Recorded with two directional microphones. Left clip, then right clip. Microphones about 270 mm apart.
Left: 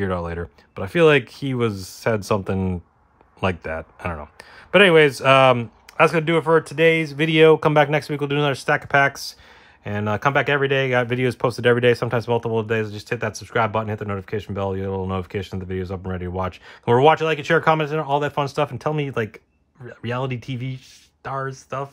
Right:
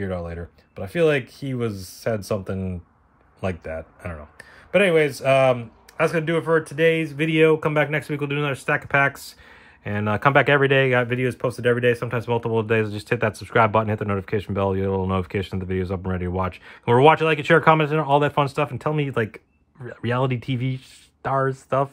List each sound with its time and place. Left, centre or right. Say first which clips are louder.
0.0 s speech: left 4 dB; centre